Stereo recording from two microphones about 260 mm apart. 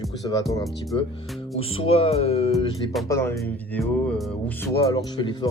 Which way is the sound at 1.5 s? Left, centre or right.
Left.